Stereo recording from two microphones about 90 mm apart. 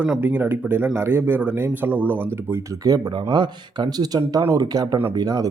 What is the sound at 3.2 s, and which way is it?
Speech, 55° right (ahead or behind).